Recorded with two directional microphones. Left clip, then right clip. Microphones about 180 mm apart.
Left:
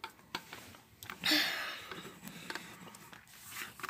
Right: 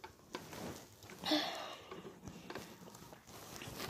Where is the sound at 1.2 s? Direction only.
20° left (ahead or behind).